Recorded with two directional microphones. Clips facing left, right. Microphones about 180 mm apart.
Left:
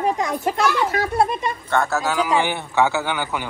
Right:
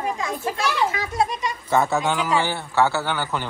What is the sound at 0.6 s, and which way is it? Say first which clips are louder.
A child's voice: left 3 dB; 60° left (ahead or behind).